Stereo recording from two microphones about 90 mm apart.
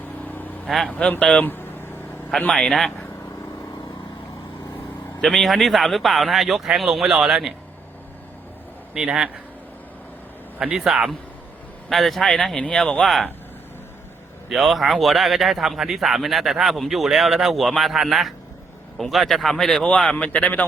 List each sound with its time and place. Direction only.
0.3 s vehicle: 20° left (ahead or behind)
0.9 s speech: 15° left (ahead or behind)
1.5 s vehicle: 25° left (ahead or behind)
2.5 s speech: 5° left (ahead or behind)
5.2 s speech: 5° left (ahead or behind)
9.0 s a man's voice: 10° right (ahead or behind)
10.6 s speech: 10° right (ahead or behind)
14.5 s speech: centre (ahead or behind); by 20.7 s 15° left (ahead or behind)